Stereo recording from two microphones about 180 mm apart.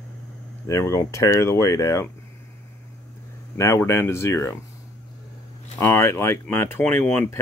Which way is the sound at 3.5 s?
15° left (ahead or behind).